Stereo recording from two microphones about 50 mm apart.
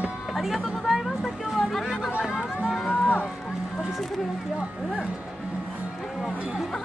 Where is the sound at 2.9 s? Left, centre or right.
Left.